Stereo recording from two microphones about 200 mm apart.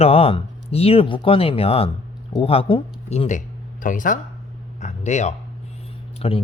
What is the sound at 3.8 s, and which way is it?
Speech, 40° left (ahead or behind).